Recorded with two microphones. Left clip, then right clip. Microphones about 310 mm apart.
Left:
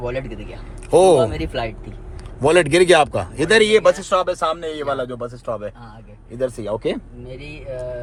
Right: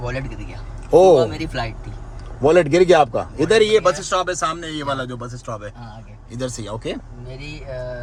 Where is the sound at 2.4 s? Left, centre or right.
Left; by 6.7 s centre.